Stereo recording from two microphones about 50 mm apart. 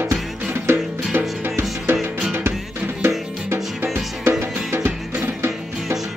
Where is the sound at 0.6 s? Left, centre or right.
Right.